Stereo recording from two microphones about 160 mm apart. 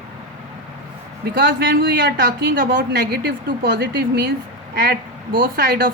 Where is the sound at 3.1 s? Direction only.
85° right.